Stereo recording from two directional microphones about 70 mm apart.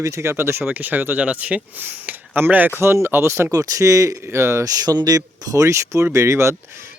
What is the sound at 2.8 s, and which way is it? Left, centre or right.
Speech, right.